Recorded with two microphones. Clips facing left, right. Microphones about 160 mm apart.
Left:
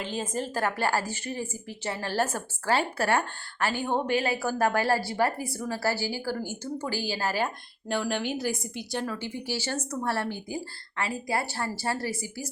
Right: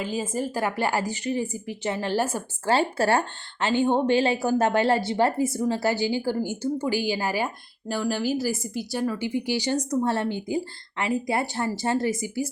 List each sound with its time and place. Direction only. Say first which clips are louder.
0.0 s speech: right 4 dB; 5° right (ahead or behind)
2.6 s speech: right 4 dB; 30° right (ahead or behind)